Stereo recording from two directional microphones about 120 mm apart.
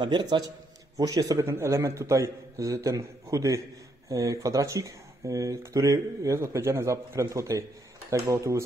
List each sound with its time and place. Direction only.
0.0 s a man's voice: 40° right (ahead or behind)